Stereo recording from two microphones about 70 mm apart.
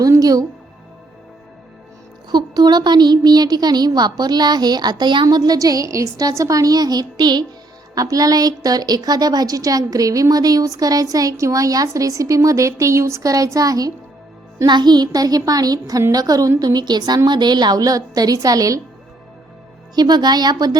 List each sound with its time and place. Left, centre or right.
0.2 s speech: right
2.3 s a woman's voice: right
7.9 s a woman's voice: right
14.7 s a woman's voice: right
16.6 s a woman's voice: right
20.0 s a woman's voice: right